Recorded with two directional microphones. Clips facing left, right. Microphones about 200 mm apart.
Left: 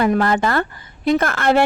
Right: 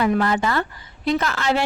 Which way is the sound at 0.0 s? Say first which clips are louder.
Left 3 dB; 50° left (ahead or behind).